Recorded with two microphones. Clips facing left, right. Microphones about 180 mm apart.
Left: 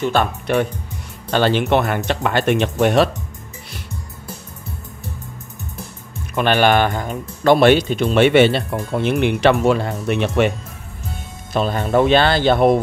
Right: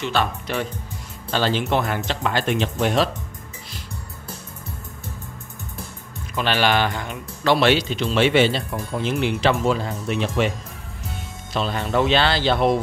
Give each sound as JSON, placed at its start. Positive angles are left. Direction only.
{"t": 0.0, "sound": "speech", "side_deg": 50}
{"t": 6.3, "sound": "speech", "side_deg": 55}
{"t": 11.5, "sound": "speech", "side_deg": 50}